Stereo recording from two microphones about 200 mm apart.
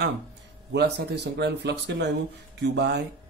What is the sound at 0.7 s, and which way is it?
Speech, 55° right (ahead or behind).